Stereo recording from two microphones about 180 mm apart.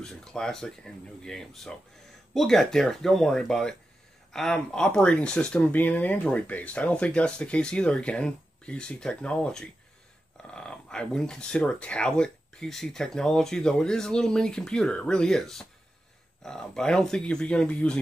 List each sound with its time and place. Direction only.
0.0 s speech: 5° left (ahead or behind)